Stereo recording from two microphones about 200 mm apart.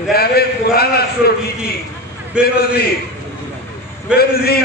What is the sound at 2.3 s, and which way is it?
Speech, 5° right (ahead or behind).